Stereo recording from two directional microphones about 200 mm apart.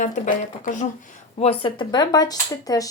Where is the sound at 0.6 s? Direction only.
40° left (ahead or behind).